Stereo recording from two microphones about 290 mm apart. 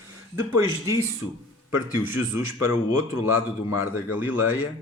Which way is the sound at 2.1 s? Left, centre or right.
Left.